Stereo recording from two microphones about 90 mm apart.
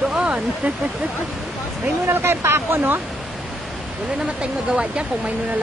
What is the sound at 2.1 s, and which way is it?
Speech, 25° right (ahead or behind).